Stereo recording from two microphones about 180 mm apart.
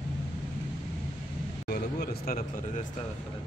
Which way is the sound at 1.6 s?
60° left (ahead or behind).